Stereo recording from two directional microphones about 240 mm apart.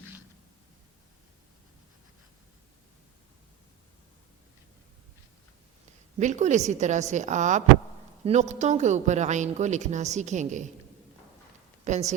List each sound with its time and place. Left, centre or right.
6.1 s speech: right
11.9 s speech: right